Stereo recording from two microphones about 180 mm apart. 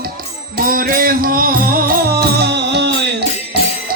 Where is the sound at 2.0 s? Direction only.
65° right (ahead or behind).